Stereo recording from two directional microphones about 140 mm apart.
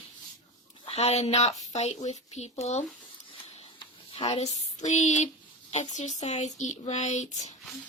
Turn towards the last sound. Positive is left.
turn(degrees=55)  # may be behind; listen again after turning